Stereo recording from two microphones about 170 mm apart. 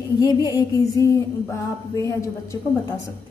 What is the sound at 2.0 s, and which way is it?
Speech, 15° left (ahead or behind).